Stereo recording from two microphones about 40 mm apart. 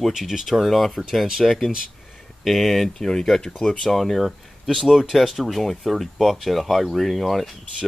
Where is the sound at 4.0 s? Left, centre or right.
Centre.